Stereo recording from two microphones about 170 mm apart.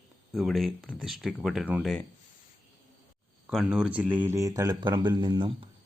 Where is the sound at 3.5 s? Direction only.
5° right (ahead or behind); by 5.7 s 30° right (ahead or behind).